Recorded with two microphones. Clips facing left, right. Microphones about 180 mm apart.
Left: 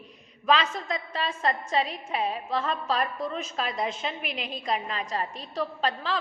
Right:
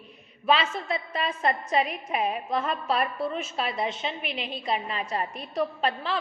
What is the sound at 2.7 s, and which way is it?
A woman's voice, 10° right (ahead or behind).